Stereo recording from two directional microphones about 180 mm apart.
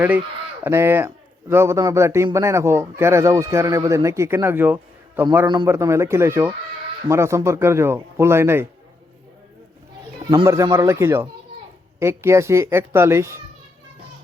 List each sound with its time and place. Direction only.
0.6 s speech: 15° right (ahead or behind)
10.2 s speech: 15° right (ahead or behind)